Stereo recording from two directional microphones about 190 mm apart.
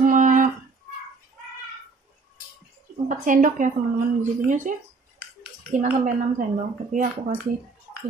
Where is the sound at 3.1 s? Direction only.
45° right (ahead or behind).